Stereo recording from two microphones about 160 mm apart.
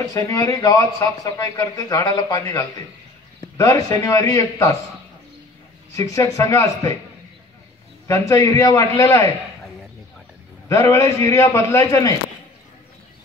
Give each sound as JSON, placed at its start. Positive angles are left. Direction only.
{"t": 0.0, "sound": "speech", "side_deg": 20}
{"t": 5.9, "sound": "speech", "side_deg": 20}
{"t": 8.1, "sound": "speech", "side_deg": 20}
{"t": 10.7, "sound": "speech", "side_deg": 20}